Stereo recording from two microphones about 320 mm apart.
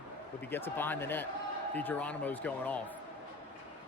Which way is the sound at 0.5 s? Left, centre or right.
Centre.